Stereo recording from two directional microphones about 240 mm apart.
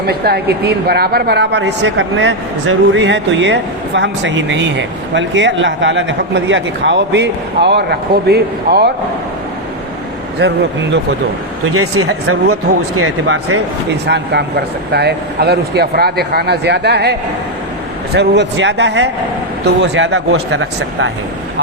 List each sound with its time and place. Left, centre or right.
0.1 s a woman's voice: right
10.4 s a woman's voice: right
11.7 s speech: right
12.0 s a woman's voice: right
13.0 s speech: right
14.1 s a woman's voice: right